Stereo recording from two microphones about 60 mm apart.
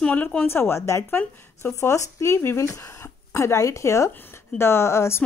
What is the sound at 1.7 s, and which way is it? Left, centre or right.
Speech, left.